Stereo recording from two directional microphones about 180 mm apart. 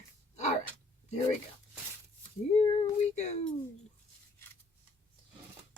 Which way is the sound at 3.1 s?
40° left (ahead or behind).